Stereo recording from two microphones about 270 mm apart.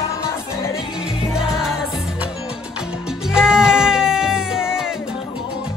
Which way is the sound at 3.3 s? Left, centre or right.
Centre.